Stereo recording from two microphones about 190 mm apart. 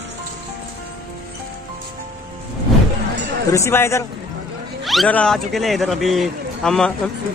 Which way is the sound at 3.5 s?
15° left (ahead or behind).